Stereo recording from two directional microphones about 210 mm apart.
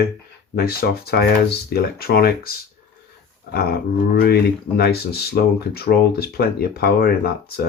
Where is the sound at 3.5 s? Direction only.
45° left (ahead or behind).